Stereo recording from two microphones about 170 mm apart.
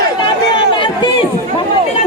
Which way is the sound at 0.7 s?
30° left (ahead or behind).